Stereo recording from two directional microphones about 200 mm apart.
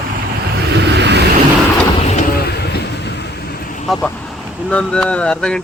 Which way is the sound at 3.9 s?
5° left (ahead or behind).